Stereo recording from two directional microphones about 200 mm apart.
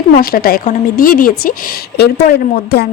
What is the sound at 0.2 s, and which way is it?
A woman's voice, 50° left (ahead or behind).